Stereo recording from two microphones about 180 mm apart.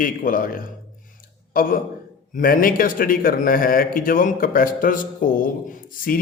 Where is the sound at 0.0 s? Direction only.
50° left (ahead or behind).